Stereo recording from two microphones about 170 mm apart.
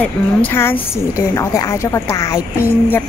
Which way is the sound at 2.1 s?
20° left (ahead or behind).